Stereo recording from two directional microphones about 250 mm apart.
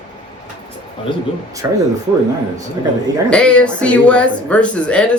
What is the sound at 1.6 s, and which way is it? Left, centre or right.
Speech, centre.